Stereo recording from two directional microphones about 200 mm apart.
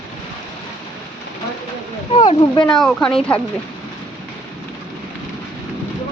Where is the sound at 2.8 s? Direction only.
Centre (ahead or behind).